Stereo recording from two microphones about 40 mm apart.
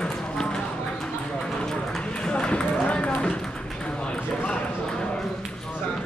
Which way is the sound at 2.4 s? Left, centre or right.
Left.